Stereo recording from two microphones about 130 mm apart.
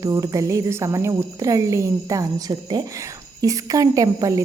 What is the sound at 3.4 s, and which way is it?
Speech, 25° right (ahead or behind).